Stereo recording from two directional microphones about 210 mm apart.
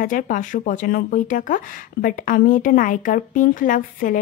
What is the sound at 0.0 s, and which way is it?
Speech, 40° left (ahead or behind).